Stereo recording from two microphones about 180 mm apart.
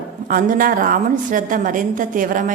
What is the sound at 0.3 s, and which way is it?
A woman's voice, 50° right (ahead or behind).